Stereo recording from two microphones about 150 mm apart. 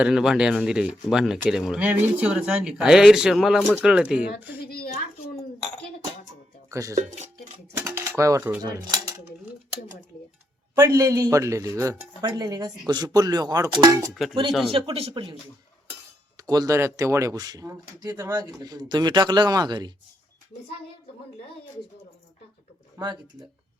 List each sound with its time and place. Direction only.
0.0 s speech: 5° right (ahead or behind)
4.6 s a child's voice: 90° left
6.7 s speech: 20° right (ahead or behind)
6.9 s speech: 50° right (ahead or behind)
7.8 s speech: 15° right (ahead or behind)
8.6 s speech: 25° right (ahead or behind)
10.8 s speech: 20° right (ahead or behind)
14.7 s speech: 35° right (ahead or behind)
16.4 s speech: 25° right (ahead or behind)
23.0 s speech: 30° right (ahead or behind)